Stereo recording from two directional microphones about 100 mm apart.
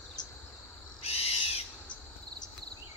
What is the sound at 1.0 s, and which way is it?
Owl, 90° left.